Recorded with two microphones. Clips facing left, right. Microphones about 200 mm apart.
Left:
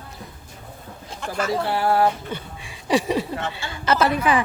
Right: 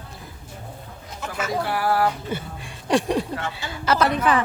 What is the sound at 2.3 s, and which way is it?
Speech, centre (ahead or behind).